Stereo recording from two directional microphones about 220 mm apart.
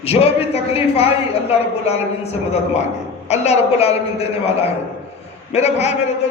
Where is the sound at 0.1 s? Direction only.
25° left (ahead or behind).